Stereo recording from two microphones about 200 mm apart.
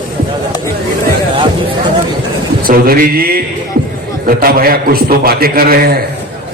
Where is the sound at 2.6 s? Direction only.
45° right (ahead or behind).